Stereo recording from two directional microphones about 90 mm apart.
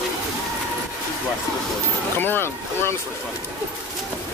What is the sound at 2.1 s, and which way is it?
Vehicle, 25° left (ahead or behind).